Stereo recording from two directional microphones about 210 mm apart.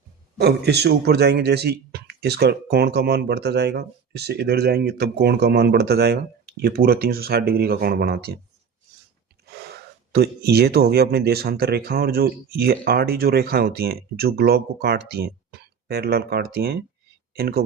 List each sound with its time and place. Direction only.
0.3 s speech: 50° right (ahead or behind)
9.5 s a sound: 50° right (ahead or behind)
10.1 s speech: 50° right (ahead or behind)